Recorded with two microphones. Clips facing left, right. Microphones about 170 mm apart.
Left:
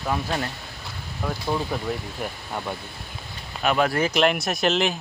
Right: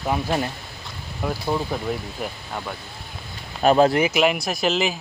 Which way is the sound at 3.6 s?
35° right (ahead or behind).